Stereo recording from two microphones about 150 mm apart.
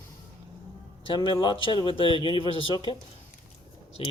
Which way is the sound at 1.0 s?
35° left (ahead or behind).